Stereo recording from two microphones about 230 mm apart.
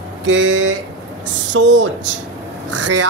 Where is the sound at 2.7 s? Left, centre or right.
Right.